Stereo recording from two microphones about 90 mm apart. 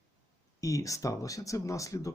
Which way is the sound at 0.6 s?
40° left (ahead or behind).